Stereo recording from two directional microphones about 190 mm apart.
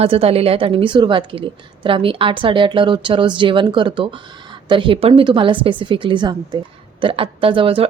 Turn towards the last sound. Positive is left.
turn(degrees=-30)  # may be behind; listen again after turning